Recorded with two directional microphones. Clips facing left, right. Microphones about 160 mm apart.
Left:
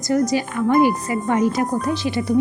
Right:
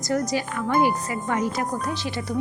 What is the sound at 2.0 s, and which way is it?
Speech, 15° left (ahead or behind).